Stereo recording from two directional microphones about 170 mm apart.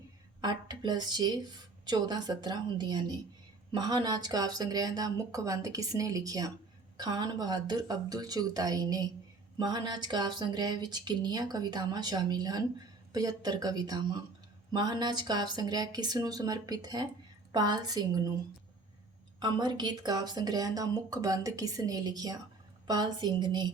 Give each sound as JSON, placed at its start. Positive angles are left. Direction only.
{"t": 0.4, "sound": "speech", "side_deg": -25}
{"t": 19.4, "sound": "speech", "side_deg": -25}